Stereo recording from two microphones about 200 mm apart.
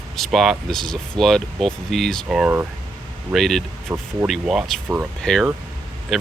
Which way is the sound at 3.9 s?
10° right (ahead or behind).